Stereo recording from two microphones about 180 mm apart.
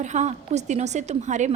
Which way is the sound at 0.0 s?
40° right (ahead or behind).